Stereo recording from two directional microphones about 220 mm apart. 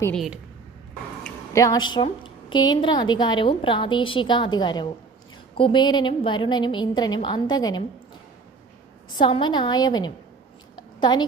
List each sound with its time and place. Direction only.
0.0 s a woman's voice: centre (ahead or behind)
1.5 s a woman's voice: 15° left (ahead or behind)
9.1 s a woman's voice: 20° left (ahead or behind)
10.8 s a sound: 20° left (ahead or behind)